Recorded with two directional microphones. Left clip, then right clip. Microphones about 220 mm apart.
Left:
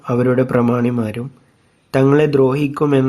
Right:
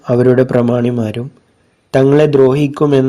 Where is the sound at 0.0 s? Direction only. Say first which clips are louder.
Right 5 dB; 10° right (ahead or behind).